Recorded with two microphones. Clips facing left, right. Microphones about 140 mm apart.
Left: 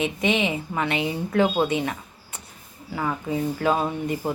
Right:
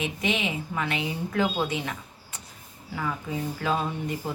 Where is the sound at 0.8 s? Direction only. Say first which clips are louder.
Left 5 dB; 65° left (ahead or behind).